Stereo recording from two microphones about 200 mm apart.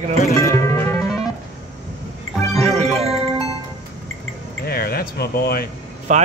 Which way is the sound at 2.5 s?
30° right (ahead or behind).